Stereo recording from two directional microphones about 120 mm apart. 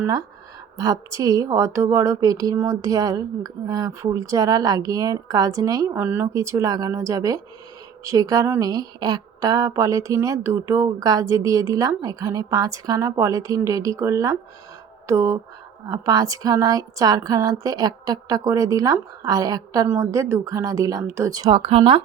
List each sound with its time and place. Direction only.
0.8 s speech: 30° right (ahead or behind)
6.0 s a woman's voice: 15° right (ahead or behind)
21.5 s speech: 50° right (ahead or behind)